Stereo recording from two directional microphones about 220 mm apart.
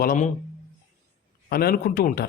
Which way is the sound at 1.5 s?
45° left (ahead or behind).